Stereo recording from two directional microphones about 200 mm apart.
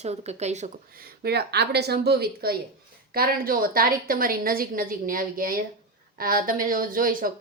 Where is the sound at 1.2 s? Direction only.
55° right (ahead or behind).